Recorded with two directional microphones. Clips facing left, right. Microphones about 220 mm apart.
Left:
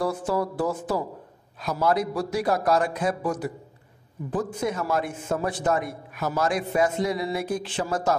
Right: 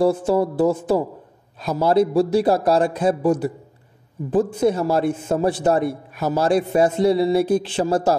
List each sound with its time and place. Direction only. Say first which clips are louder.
0.0 s a man's voice: right 8 dB; 25° right (ahead or behind)